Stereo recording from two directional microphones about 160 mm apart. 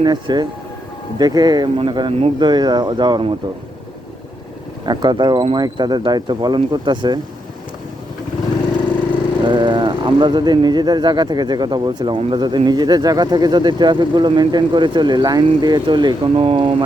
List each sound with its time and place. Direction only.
0.0 s speech: 30° right (ahead or behind)
4.9 s speech: 30° right (ahead or behind)
9.4 s speech: 30° right (ahead or behind)